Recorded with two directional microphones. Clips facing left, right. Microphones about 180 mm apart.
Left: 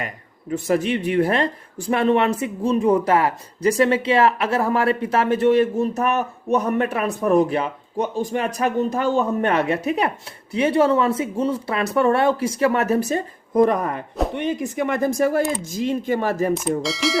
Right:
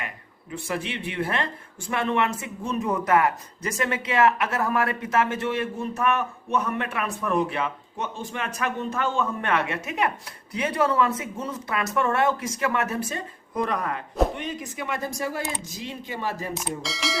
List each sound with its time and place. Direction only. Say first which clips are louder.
0.5 s speech: left 10 dB; 40° left (ahead or behind)
16.8 s speech: left 8 dB; centre (ahead or behind)